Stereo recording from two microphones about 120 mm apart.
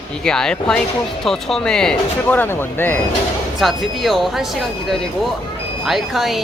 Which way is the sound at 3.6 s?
Centre (ahead or behind).